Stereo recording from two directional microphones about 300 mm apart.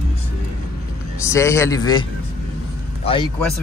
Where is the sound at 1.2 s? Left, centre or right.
Centre.